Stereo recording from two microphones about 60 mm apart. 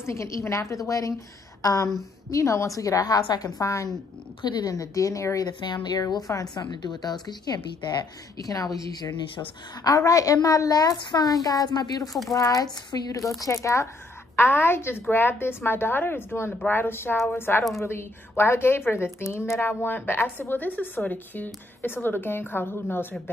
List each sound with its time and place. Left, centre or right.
0.0 s a woman's voice: left
4.6 s speech: left
5.9 s a woman's voice: left
8.4 s a woman's voice: left
12.3 s speech: left
13.4 s a woman's voice: left
14.3 s a woman's voice: left